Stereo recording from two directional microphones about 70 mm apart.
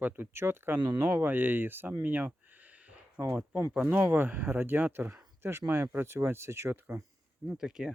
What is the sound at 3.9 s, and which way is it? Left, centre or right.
Speech, right.